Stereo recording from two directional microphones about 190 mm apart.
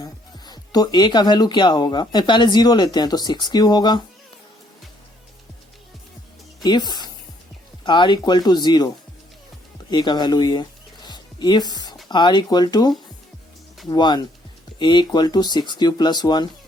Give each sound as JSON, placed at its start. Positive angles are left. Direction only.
{"t": 0.0, "sound": "speech", "side_deg": 20}
{"t": 6.6, "sound": "a woman's voice", "side_deg": 20}
{"t": 9.9, "sound": "music", "side_deg": 20}
{"t": 12.0, "sound": "speech", "side_deg": 25}